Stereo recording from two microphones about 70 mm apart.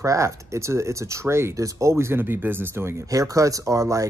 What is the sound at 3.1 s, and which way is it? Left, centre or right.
Speech, right.